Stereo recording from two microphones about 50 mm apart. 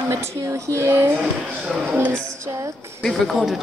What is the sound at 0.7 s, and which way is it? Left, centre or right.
Speech, right.